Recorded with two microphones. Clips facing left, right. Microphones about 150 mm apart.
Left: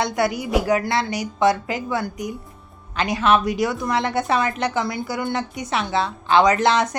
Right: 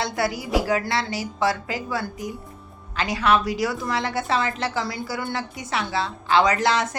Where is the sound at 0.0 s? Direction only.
20° left (ahead or behind).